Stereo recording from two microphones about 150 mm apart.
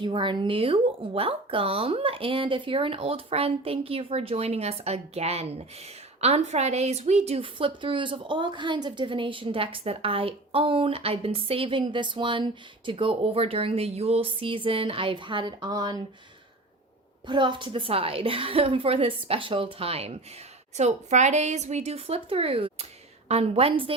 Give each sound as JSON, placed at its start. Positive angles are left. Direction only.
{"t": 0.0, "sound": "a woman's voice", "side_deg": -35}
{"t": 17.2, "sound": "a woman's voice", "side_deg": -30}